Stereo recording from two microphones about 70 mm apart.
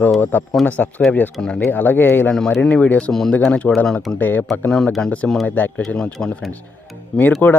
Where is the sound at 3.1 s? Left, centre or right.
Centre.